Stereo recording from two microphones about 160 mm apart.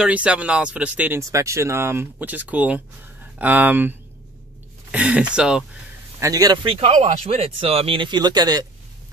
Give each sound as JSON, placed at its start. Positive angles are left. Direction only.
{"t": 0.0, "sound": "speech", "side_deg": -5}
{"t": 4.9, "sound": "speech", "side_deg": -5}
{"t": 6.1, "sound": "speech", "side_deg": -20}